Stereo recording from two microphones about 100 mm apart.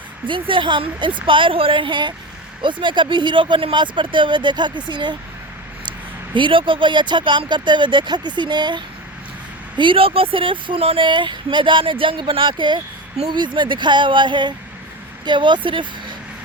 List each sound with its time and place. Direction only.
0.3 s speech: 55° right (ahead or behind)
6.3 s speech: 55° right (ahead or behind)
9.7 s speech: 55° right (ahead or behind)